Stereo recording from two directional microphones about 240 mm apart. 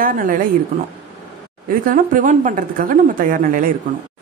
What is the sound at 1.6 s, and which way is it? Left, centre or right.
A woman's voice, right.